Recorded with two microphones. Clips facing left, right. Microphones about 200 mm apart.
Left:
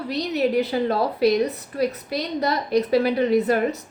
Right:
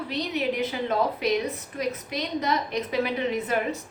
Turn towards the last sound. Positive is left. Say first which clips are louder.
# left 7 dB
turn(degrees=40)  # may be behind; listen again after turning